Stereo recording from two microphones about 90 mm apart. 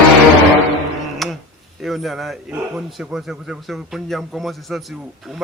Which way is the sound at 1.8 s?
Centre (ahead or behind).